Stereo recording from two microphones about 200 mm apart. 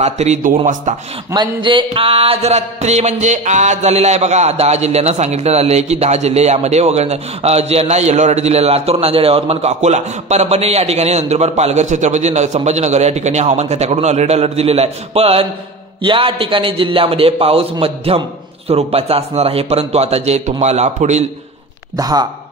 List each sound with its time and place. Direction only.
0.0 s music: 35° right (ahead or behind)
1.3 s music: 25° right (ahead or behind)
16.0 s a man's voice: 25° right (ahead or behind)
18.7 s music: 30° right (ahead or behind)
21.9 s a man's voice: 20° right (ahead or behind)